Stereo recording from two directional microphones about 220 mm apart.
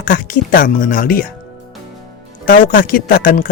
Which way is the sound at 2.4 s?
40° left (ahead or behind).